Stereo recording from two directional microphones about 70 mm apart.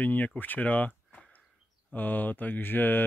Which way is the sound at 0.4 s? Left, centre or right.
Left.